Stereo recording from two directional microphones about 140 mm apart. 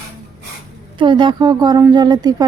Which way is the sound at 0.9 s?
35° right (ahead or behind).